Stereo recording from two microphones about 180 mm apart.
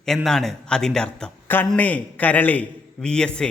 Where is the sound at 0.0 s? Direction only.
5° left (ahead or behind).